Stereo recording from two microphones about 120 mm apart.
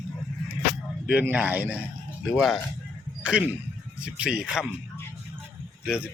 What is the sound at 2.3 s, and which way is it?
Speech, centre (ahead or behind).